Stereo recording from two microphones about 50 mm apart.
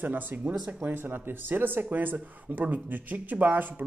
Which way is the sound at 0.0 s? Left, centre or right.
Right.